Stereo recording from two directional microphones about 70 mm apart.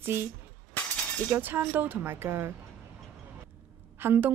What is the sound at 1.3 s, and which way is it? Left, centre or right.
A woman's voice, right.